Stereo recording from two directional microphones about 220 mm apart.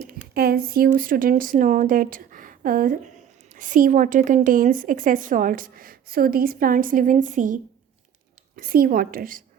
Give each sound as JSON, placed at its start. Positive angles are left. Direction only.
{"t": 0.3, "sound": "a woman's voice", "side_deg": -45}